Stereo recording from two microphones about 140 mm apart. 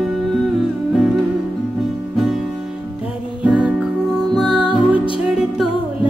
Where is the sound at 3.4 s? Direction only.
5° right (ahead or behind).